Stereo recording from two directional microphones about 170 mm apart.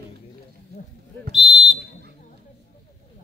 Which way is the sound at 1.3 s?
Centre (ahead or behind).